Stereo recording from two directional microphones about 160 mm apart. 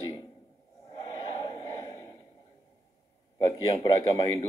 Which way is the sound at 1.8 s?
20° left (ahead or behind).